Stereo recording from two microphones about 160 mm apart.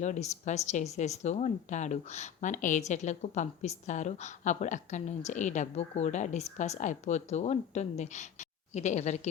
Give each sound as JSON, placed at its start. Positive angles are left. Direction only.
{"t": 0.0, "sound": "speech", "side_deg": 45}